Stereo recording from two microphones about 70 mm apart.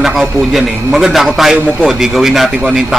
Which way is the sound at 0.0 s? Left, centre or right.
Centre.